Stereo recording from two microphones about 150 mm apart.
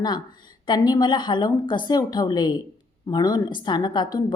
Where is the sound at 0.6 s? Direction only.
30° left (ahead or behind).